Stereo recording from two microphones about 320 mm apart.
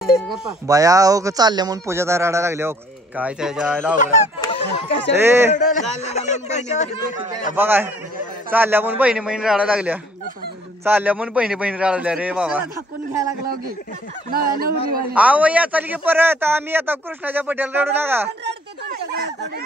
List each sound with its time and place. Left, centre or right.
0.3 s a man's voice: centre
3.9 s speech: centre
5.1 s speech: centre
5.7 s speech: left
7.5 s a man's voice: centre
14.6 s a man's voice: right
15.1 s a man's voice: centre
18.4 s a sound: right